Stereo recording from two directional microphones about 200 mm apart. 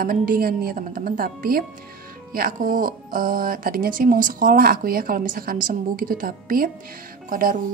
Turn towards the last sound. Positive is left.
turn(degrees=-45)  # may be behind; listen again after turning